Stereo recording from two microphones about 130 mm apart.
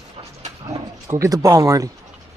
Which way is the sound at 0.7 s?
25° right (ahead or behind).